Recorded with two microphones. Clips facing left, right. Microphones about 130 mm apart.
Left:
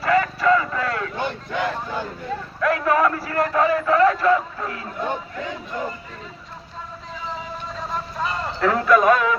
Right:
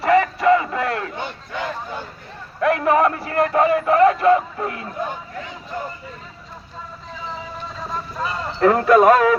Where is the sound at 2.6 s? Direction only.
25° right (ahead or behind).